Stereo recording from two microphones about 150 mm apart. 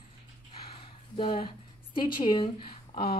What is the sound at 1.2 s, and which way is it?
Speech, 35° left (ahead or behind).